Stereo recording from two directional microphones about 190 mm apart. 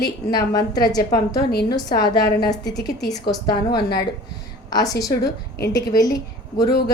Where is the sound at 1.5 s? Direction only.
55° left (ahead or behind).